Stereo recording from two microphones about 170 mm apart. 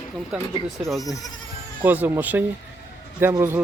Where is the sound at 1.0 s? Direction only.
20° left (ahead or behind).